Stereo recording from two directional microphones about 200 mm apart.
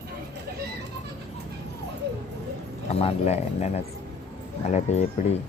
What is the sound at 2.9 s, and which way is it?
Speech, 30° left (ahead or behind).